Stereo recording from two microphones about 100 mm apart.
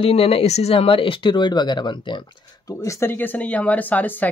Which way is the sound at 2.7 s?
30° left (ahead or behind).